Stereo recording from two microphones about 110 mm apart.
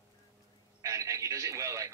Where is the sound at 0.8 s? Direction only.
30° right (ahead or behind).